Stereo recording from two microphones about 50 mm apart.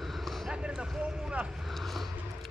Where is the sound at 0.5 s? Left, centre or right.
Centre.